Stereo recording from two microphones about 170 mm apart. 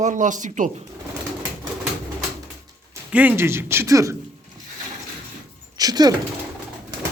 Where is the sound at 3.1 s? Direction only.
10° right (ahead or behind).